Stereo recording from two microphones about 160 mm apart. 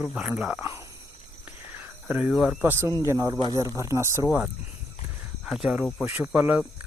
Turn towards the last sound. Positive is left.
turn(degrees=-10)  # may be behind; listen again after turning